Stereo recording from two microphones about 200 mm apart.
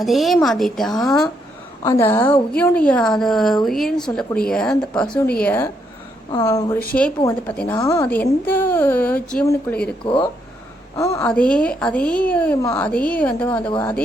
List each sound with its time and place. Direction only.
0.0 s speech: centre (ahead or behind)
1.8 s a woman's voice: 15° left (ahead or behind)
10.0 s a woman's voice: 25° left (ahead or behind)
11.3 s a woman's voice: 5° left (ahead or behind)